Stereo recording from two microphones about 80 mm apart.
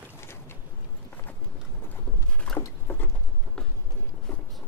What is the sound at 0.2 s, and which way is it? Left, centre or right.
Boat, left.